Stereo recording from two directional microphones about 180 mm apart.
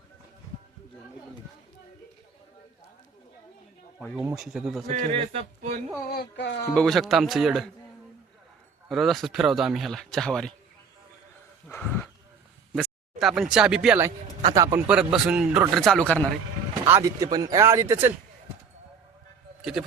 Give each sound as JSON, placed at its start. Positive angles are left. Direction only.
{"t": 4.4, "sound": "a man's voice", "side_deg": 0}
{"t": 4.9, "sound": "speech", "side_deg": -35}
{"t": 6.1, "sound": "speech", "side_deg": 75}
{"t": 6.7, "sound": "a man's voice", "side_deg": 5}
{"t": 8.9, "sound": "a man's voice", "side_deg": 0}
{"t": 11.7, "sound": "speech", "side_deg": 10}
{"t": 14.5, "sound": "a man's voice", "side_deg": -15}
{"t": 16.8, "sound": "speech", "side_deg": -15}